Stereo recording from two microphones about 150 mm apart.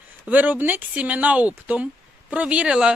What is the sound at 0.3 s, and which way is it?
A man's voice, 10° right (ahead or behind).